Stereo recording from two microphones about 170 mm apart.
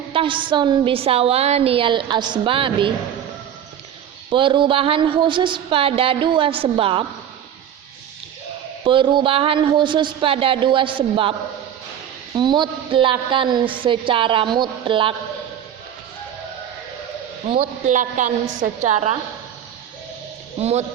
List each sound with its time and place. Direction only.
0.1 s a woman's voice: 30° right (ahead or behind)
4.3 s a woman's voice: 30° right (ahead or behind)
8.8 s a woman's voice: 30° right (ahead or behind)
12.4 s a woman's voice: 25° right (ahead or behind)
17.6 s a woman's voice: 45° right (ahead or behind)
20.6 s a woman's voice: 40° right (ahead or behind)